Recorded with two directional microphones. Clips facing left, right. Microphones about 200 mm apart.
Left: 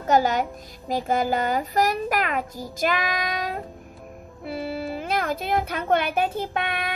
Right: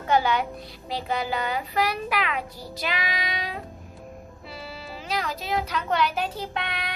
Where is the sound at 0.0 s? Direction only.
45° left (ahead or behind).